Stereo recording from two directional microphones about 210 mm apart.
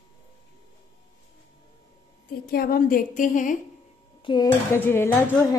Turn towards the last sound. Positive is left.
turn(degrees=10)  # may be behind; listen again after turning